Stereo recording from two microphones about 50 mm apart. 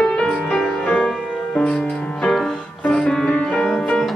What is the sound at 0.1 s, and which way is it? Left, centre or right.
Music, centre.